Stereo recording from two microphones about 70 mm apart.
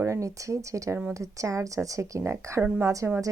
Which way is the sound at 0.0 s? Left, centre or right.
Right.